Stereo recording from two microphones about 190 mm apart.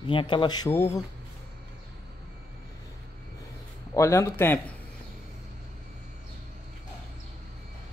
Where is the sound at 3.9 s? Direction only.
15° left (ahead or behind).